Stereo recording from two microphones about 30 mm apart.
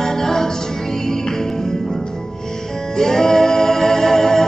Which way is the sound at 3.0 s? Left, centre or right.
Centre.